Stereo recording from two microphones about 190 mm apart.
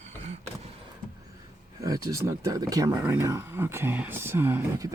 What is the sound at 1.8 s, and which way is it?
Speech, 15° right (ahead or behind).